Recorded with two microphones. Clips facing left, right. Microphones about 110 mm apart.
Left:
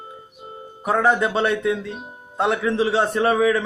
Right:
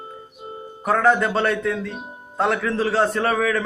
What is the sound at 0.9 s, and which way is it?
A man's voice, 15° left (ahead or behind).